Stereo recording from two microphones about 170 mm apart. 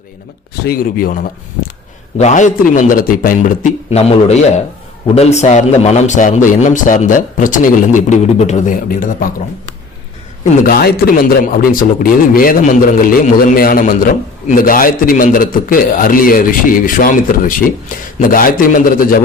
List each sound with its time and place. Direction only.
0.6 s a man's voice: 60° left (ahead or behind)
2.1 s a man's voice: 45° left (ahead or behind)
10.7 s a man's voice: 65° left (ahead or behind)